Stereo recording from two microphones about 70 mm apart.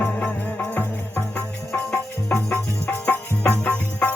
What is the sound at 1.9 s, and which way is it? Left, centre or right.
Music, left.